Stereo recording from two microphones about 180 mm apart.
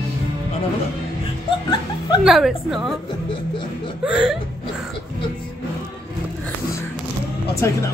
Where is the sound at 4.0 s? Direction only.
5° right (ahead or behind).